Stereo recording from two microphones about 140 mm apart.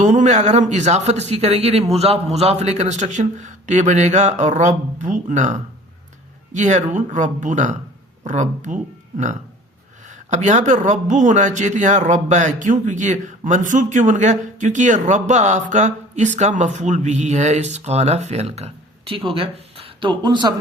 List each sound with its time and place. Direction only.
0.0 s a man's voice: 60° right (ahead or behind); by 20.5 s 35° right (ahead or behind)